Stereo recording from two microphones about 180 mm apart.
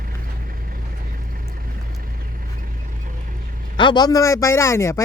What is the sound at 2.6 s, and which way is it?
Vehicle, 45° right (ahead or behind).